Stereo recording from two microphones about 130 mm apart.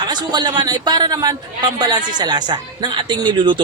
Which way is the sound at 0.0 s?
35° right (ahead or behind).